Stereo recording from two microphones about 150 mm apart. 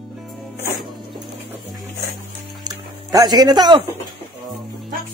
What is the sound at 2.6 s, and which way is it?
Music, 25° right (ahead or behind).